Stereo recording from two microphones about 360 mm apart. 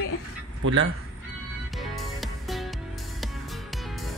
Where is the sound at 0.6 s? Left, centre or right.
Right.